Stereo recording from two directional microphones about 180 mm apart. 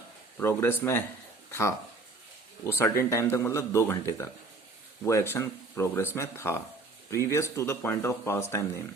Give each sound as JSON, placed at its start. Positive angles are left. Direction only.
{"t": 0.3, "sound": "speech", "side_deg": 10}